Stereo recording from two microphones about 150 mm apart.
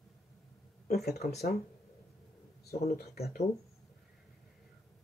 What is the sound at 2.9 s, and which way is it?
Speech, 90° left.